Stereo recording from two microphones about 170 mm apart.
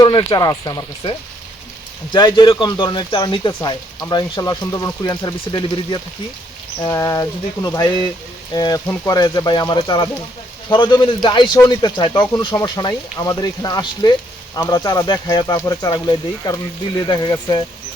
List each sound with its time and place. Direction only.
0.0 s speech: 25° left (ahead or behind)
2.1 s speech: 25° left (ahead or behind)